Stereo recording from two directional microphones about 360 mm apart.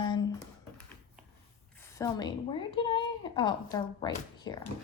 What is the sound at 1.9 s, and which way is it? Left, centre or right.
Speech, centre.